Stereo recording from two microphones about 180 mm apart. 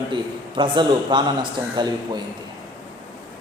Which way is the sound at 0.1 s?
25° right (ahead or behind).